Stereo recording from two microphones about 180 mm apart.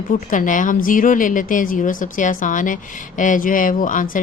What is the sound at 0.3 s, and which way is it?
Speech, 45° left (ahead or behind).